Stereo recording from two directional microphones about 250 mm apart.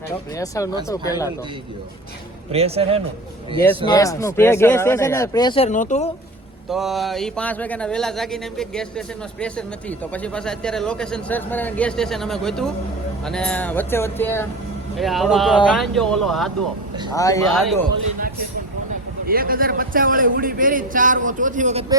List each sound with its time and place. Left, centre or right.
0.3 s speech: centre
2.5 s speech: right
3.8 s speech: centre; by 6.1 s left
6.7 s speech: centre
17.2 s speech: centre
17.5 s speech: centre
19.3 s a man's voice: right